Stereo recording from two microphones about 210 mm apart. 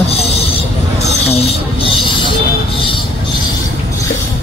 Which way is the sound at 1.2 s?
30° left (ahead or behind).